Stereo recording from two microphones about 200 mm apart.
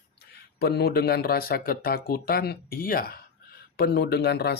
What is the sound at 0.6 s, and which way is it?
Speech, 50° left (ahead or behind).